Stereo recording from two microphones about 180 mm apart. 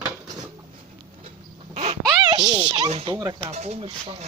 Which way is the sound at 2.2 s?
20° right (ahead or behind).